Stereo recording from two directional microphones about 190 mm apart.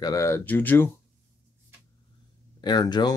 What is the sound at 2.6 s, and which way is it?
Speech, 20° left (ahead or behind).